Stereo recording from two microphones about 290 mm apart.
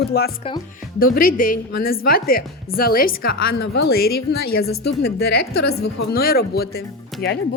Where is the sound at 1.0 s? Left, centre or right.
Left.